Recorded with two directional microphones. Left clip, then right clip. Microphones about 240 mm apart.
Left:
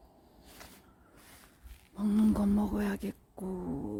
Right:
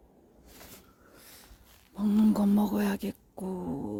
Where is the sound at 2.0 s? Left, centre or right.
Centre.